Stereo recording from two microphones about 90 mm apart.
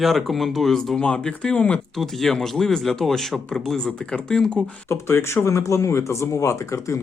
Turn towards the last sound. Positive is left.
turn(degrees=35)  # may be behind; listen again after turning